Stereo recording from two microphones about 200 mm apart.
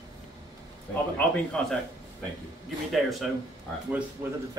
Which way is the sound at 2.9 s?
Centre (ahead or behind).